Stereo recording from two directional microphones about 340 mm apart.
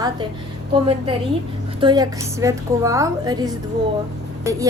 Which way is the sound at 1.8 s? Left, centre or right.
Centre.